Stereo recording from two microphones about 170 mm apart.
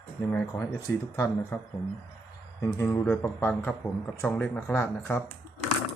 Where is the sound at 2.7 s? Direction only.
15° left (ahead or behind).